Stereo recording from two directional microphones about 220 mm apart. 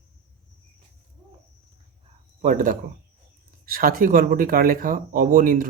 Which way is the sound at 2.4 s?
35° right (ahead or behind).